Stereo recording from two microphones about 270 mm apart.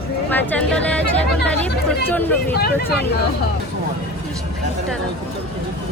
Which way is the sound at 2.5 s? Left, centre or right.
Left.